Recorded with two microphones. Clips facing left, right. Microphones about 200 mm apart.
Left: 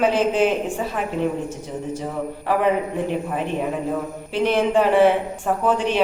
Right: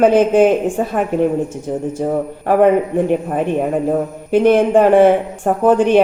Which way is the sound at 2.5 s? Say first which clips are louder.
Right 9 dB; 50° right (ahead or behind).